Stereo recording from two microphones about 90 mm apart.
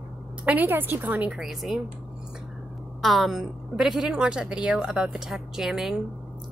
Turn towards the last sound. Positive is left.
turn(degrees=-5)  # may be behind; listen again after turning